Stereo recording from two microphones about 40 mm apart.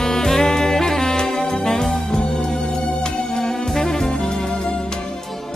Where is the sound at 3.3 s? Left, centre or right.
Centre.